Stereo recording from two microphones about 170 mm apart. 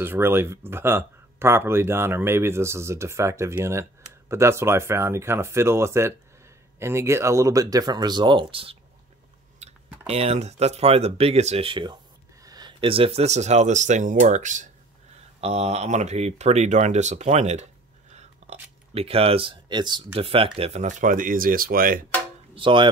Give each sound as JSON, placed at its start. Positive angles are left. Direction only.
{"t": 0.0, "sound": "speech", "side_deg": -15}
{"t": 9.6, "sound": "clicking", "side_deg": -40}
{"t": 10.0, "sound": "speech", "side_deg": -35}
{"t": 22.5, "sound": "speech", "side_deg": -30}